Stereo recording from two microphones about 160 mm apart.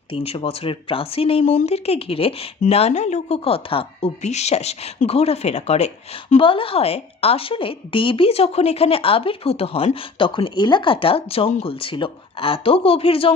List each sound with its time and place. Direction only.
0.1 s speech: 35° left (ahead or behind)